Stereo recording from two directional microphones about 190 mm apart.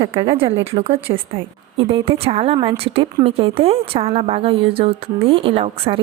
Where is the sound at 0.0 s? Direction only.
30° right (ahead or behind).